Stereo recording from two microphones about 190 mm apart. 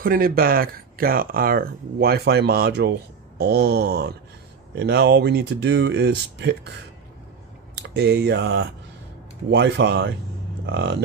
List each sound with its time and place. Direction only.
0.0 s speech: 50° right (ahead or behind)
7.7 s speech: 60° right (ahead or behind)